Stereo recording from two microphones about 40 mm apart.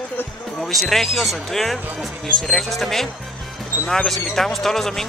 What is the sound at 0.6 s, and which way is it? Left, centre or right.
Speech, centre.